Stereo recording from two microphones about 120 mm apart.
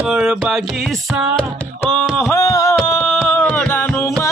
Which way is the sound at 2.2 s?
25° left (ahead or behind).